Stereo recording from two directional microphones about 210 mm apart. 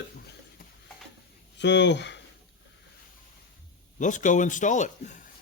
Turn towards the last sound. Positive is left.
turn(degrees=35)  # may be behind; listen again after turning